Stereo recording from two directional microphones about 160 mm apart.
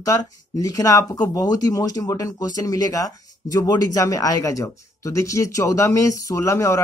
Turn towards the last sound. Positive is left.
turn(degrees=20)  # may be behind; listen again after turning